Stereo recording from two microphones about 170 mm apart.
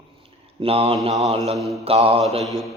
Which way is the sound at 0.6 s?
35° right (ahead or behind).